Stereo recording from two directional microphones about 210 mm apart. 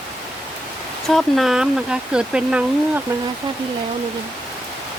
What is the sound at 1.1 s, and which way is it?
Speech, centre (ahead or behind).